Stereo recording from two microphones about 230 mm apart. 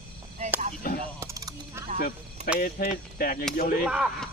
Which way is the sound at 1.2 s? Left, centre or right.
Centre.